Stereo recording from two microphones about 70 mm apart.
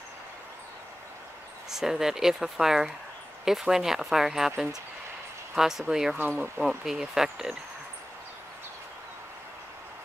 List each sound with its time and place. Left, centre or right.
1.7 s speech: centre
6.1 s speech: right
6.6 s speech: centre